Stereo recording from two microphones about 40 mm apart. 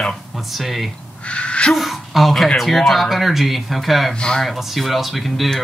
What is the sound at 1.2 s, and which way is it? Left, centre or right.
Crow, left.